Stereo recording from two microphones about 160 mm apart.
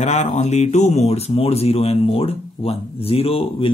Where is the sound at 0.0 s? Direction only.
45° left (ahead or behind).